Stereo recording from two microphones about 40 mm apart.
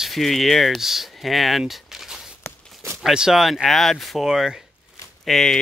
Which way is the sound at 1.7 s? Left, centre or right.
Centre.